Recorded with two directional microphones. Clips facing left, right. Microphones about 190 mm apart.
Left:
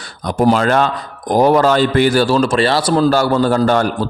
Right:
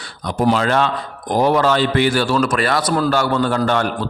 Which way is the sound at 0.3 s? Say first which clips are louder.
Left 3 dB; 45° left (ahead or behind).